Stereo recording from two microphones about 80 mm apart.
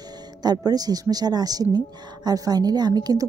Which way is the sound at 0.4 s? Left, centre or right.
Right.